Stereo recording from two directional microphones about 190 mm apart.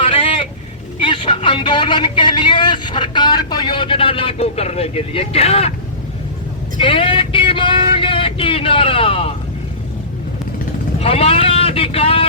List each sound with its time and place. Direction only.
0.1 s vehicle: 30° left (ahead or behind)
0.9 s a man's voice: 25° left (ahead or behind)
6.7 s vehicle: 30° left (ahead or behind)
11.0 s vehicle: 30° left (ahead or behind)